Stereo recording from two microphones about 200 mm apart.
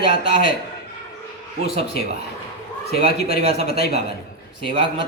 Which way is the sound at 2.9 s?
50° left (ahead or behind).